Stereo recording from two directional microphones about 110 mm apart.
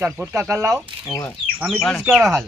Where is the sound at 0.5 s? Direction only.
30° right (ahead or behind).